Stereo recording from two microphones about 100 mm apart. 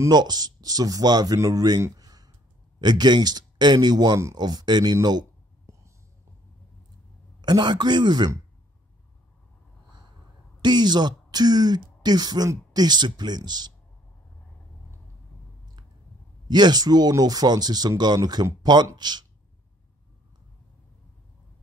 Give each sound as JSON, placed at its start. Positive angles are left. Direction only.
{"t": 0.1, "sound": "speech", "side_deg": -45}
{"t": 5.7, "sound": "whispering", "side_deg": -30}
{"t": 7.4, "sound": "speech", "side_deg": -45}
{"t": 10.6, "sound": "speech", "side_deg": -45}
{"t": 16.4, "sound": "speech", "side_deg": -45}